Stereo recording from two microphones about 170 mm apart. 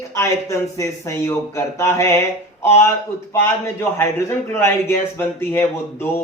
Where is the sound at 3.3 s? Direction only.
15° left (ahead or behind).